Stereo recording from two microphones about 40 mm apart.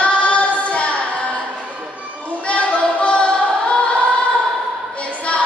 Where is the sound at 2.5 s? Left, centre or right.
Left.